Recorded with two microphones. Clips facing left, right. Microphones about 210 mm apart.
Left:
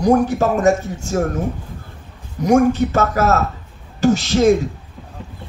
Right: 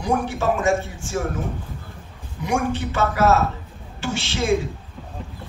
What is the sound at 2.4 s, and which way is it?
A man's voice, 40° left (ahead or behind).